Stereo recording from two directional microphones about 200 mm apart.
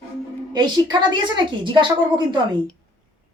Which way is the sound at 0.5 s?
20° right (ahead or behind).